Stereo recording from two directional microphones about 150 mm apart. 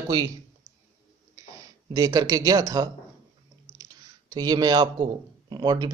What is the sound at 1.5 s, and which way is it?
Speech, 25° right (ahead or behind).